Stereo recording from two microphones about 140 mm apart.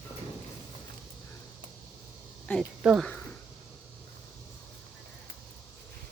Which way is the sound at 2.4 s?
5° left (ahead or behind).